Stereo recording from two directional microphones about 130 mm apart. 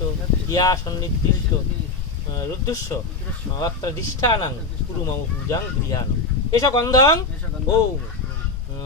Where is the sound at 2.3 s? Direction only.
30° left (ahead or behind).